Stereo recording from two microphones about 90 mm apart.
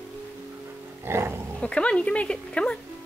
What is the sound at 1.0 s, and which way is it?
Dog, 30° right (ahead or behind).